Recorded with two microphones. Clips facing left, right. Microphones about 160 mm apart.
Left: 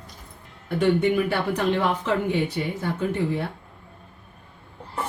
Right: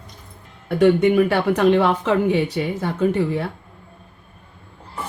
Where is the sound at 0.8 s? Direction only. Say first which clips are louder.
Right 6 dB; 65° right (ahead or behind).